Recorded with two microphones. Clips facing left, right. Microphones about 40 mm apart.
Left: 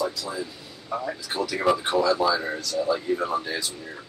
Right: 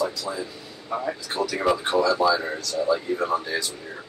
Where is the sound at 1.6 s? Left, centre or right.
Centre.